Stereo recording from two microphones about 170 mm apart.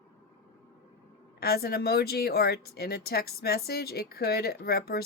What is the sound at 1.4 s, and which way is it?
Speech, 65° left (ahead or behind).